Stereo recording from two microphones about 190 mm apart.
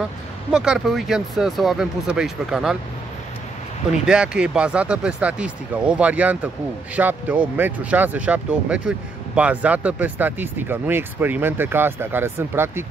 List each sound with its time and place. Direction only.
0.5 s speech: 5° right (ahead or behind)
3.9 s speech: 5° right (ahead or behind)